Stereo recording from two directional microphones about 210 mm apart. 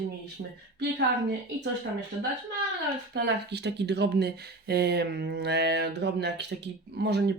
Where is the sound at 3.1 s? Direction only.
50° right (ahead or behind).